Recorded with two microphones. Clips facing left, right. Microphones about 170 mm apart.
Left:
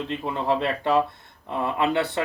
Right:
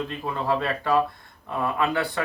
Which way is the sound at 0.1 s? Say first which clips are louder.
Left 1 dB; 25° left (ahead or behind).